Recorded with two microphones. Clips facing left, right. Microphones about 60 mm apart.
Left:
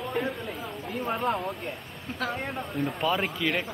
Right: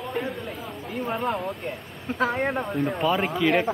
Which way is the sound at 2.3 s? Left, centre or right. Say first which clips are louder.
Right 8 dB; right.